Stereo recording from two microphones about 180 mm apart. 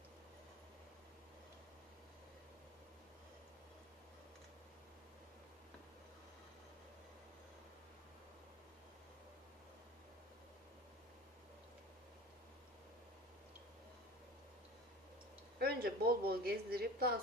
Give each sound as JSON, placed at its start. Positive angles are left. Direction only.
{"t": 15.5, "sound": "a woman's voice", "side_deg": -60}